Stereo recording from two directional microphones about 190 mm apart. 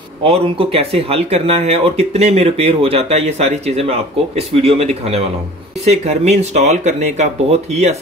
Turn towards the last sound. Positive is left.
turn(degrees=-35)  # may be behind; listen again after turning